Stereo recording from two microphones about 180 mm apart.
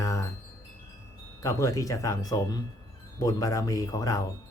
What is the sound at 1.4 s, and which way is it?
Speech, 20° left (ahead or behind).